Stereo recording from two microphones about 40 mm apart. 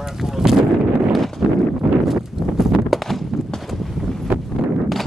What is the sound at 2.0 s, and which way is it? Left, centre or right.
Horse, centre.